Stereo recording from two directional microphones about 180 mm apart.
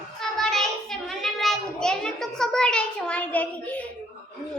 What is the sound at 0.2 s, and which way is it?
Child singing, centre (ahead or behind).